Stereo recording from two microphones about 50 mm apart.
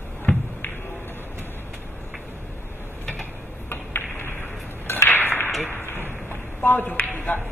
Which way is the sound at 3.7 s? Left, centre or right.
Left.